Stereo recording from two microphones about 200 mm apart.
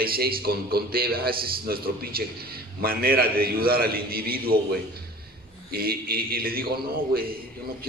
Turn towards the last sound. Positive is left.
turn(degrees=-50)  # may be behind; listen again after turning